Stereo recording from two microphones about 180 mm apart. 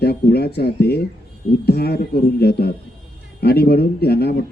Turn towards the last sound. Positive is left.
turn(degrees=60)  # may be behind; listen again after turning